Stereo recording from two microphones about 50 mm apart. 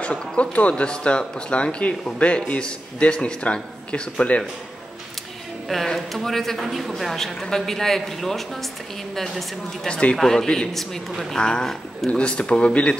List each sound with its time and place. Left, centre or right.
0.0 s speech: left
5.9 s a man's voice: centre
9.8 s speech: left
10.1 s a man's voice: centre
11.3 s speech: centre
12.1 s speech: left